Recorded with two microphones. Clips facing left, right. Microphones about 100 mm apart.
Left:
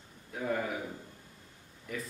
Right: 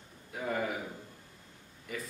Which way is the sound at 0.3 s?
Centre (ahead or behind).